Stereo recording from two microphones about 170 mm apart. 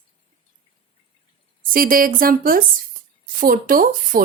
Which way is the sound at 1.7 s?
55° right (ahead or behind).